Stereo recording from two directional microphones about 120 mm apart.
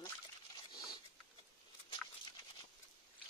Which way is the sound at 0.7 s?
35° left (ahead or behind).